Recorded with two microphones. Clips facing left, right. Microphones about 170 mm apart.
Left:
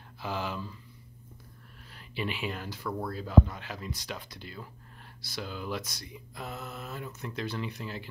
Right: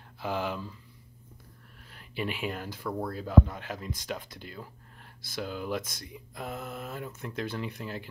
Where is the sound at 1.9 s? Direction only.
50° right (ahead or behind).